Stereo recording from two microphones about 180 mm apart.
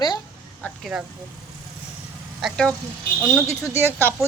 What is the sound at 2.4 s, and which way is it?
A woman's voice, 5° left (ahead or behind).